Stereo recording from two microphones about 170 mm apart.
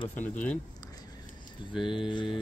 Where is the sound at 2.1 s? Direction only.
30° left (ahead or behind).